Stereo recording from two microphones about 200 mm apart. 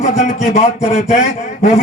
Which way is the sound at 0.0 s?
40° left (ahead or behind).